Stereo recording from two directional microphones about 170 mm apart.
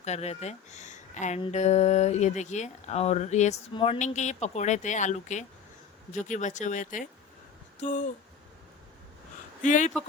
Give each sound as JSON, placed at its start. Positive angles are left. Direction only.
{"t": 0.0, "sound": "speech", "side_deg": 40}
{"t": 9.6, "sound": "speech", "side_deg": 45}